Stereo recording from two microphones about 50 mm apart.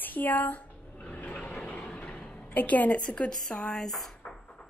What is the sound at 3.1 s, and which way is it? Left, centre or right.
Speech, centre.